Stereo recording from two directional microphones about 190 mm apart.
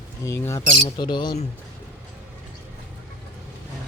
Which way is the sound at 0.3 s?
15° left (ahead or behind).